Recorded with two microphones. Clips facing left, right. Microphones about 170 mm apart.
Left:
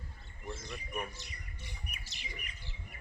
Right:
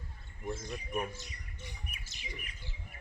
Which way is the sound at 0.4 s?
45° right (ahead or behind).